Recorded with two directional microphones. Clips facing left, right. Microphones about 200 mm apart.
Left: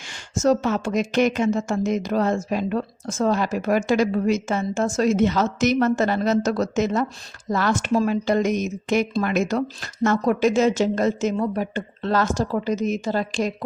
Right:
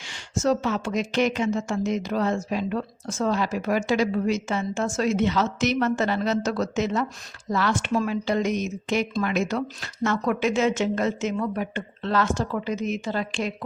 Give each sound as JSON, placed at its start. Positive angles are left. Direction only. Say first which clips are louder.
{"t": 0.0, "sound": "a woman's voice", "louder": "left 4 dB", "side_deg": 45}